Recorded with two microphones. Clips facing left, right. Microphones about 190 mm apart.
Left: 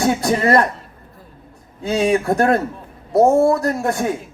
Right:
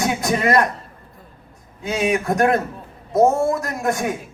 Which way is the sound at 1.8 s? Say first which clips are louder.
Left 3 dB; 30° left (ahead or behind).